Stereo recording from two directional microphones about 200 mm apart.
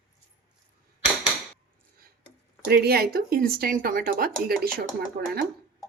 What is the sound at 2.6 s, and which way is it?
Speech, 55° right (ahead or behind).